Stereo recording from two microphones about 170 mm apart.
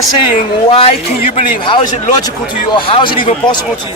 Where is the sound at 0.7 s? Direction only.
35° left (ahead or behind).